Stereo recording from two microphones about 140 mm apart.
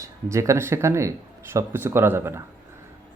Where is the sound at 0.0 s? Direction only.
20° right (ahead or behind).